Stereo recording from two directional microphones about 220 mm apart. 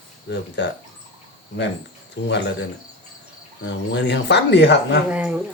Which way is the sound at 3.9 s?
50° left (ahead or behind).